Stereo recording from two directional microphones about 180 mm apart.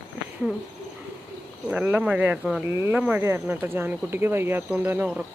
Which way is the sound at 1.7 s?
10° right (ahead or behind).